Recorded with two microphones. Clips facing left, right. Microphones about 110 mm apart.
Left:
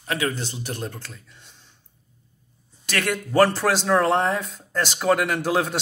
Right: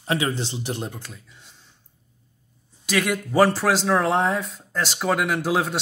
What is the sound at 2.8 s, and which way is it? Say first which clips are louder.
Speech: right 2 dB; 10° right (ahead or behind).